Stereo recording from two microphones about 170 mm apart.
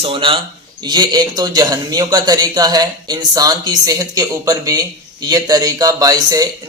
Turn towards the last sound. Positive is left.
turn(degrees=-20)  # may be behind; listen again after turning